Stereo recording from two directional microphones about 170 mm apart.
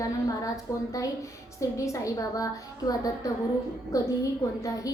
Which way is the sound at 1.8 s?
20° left (ahead or behind).